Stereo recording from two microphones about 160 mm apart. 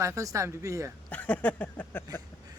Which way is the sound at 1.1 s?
10° left (ahead or behind).